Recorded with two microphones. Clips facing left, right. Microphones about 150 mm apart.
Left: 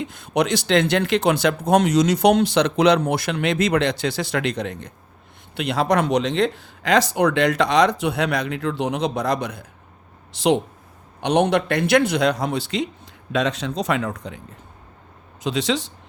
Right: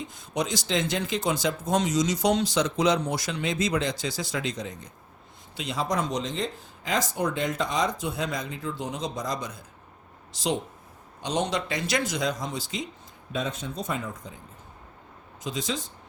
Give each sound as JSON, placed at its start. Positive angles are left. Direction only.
{"t": 0.0, "sound": "speech", "side_deg": 70}
{"t": 13.3, "sound": "speech", "side_deg": 85}
{"t": 15.4, "sound": "speech", "side_deg": 75}